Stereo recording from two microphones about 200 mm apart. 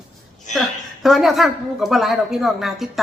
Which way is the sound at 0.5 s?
35° left (ahead or behind).